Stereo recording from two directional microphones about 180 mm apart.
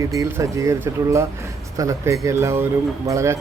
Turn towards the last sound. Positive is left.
turn(degrees=-15)  # may be behind; listen again after turning